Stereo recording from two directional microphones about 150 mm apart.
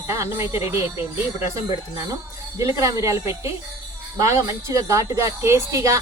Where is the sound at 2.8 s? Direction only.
20° right (ahead or behind).